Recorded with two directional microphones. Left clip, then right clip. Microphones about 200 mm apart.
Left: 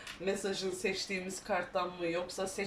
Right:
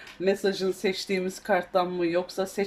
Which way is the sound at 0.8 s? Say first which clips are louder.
Right 8 dB; 50° right (ahead or behind).